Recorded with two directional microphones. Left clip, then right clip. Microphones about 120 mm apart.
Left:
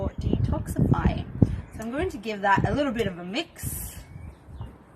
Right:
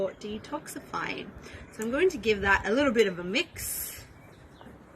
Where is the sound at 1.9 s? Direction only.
20° left (ahead or behind).